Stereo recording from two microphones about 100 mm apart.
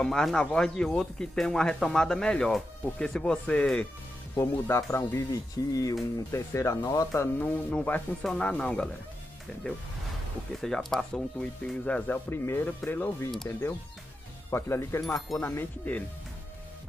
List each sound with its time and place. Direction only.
0.0 s speech: 5° left (ahead or behind)
4.4 s speech: 30° left (ahead or behind)
7.2 s speech: 20° left (ahead or behind)
10.6 s speech: 5° left (ahead or behind)
12.3 s speech: 25° left (ahead or behind)